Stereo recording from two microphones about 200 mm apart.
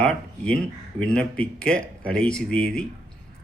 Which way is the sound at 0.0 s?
5° left (ahead or behind).